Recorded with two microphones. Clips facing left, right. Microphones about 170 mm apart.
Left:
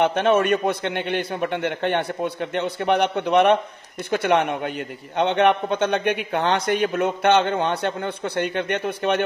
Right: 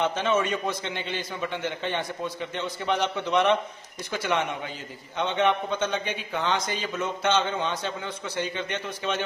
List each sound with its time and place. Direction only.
0.0 s a man's voice: 60° left (ahead or behind)